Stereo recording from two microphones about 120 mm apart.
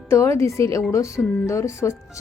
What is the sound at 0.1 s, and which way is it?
A woman's voice, 25° left (ahead or behind).